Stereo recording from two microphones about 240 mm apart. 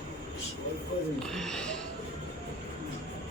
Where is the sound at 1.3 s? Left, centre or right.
Centre.